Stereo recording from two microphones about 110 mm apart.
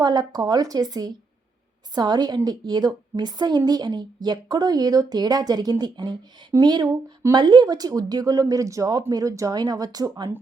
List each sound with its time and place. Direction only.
0.0 s speech: 40° right (ahead or behind)